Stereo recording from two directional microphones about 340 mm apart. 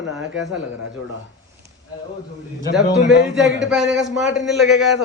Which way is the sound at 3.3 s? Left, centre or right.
Right.